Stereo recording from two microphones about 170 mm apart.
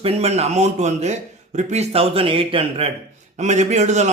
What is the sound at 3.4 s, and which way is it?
Speech, 45° right (ahead or behind).